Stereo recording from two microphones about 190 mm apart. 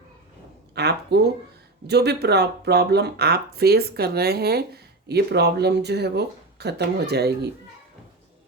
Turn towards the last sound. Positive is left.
turn(degrees=-60)  # may be behind; listen again after turning